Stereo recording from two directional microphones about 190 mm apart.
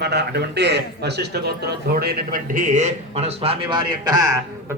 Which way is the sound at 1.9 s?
50° right (ahead or behind).